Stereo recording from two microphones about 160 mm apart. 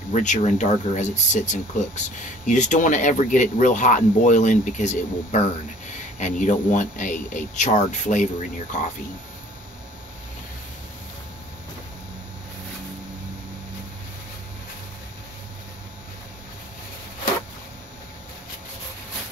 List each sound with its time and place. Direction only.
0.1 s speech: 50° left (ahead or behind)